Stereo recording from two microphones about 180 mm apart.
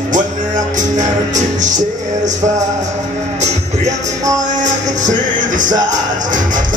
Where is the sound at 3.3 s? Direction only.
40° right (ahead or behind).